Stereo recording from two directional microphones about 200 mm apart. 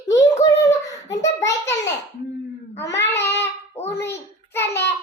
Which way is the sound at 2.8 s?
60° left (ahead or behind).